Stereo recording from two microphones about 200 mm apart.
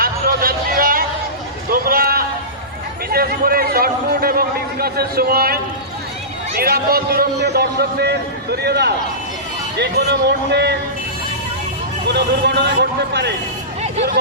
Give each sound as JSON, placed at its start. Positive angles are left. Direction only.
{"t": 0.0, "sound": "a sound", "side_deg": -45}
{"t": 3.1, "sound": "a man's voice", "side_deg": -50}
{"t": 6.6, "sound": "a man's voice", "side_deg": -50}
{"t": 12.0, "sound": "speech", "side_deg": -60}